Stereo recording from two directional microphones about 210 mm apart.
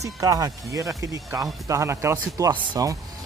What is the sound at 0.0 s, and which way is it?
Speech, 15° right (ahead or behind).